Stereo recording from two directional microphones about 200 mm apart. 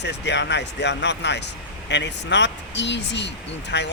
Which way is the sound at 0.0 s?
60° left (ahead or behind).